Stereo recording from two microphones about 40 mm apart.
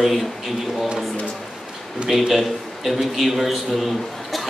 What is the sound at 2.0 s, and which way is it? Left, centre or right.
A man's voice, centre.